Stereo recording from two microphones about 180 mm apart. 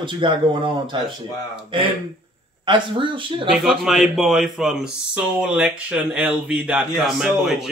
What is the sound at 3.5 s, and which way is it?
Speech, centre (ahead or behind).